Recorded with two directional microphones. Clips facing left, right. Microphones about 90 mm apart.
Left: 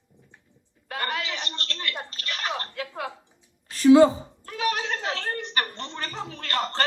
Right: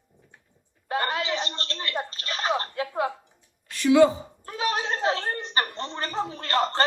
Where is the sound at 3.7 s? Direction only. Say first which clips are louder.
Left 3 dB; 35° left (ahead or behind).